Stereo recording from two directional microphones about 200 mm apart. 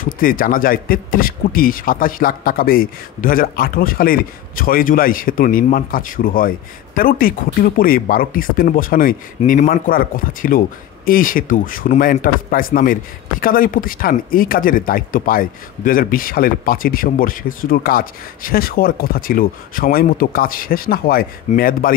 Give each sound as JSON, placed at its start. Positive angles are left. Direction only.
{"t": 0.0, "sound": "a man's voice", "side_deg": 45}